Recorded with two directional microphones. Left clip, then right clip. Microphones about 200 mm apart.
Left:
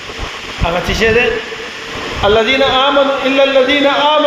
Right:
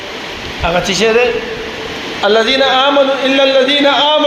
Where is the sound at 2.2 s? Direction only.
30° right (ahead or behind).